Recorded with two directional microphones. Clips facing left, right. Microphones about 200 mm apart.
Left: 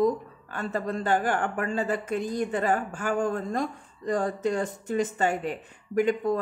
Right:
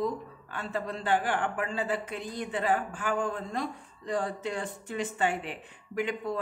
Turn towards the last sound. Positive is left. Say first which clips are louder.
# left 8 dB
turn(degrees=45)  # may be behind; listen again after turning